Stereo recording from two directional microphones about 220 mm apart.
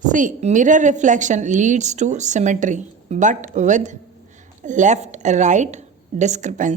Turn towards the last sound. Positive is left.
turn(degrees=-35)  # may be behind; listen again after turning